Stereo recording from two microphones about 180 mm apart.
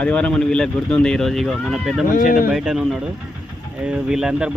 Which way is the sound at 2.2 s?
50° left (ahead or behind).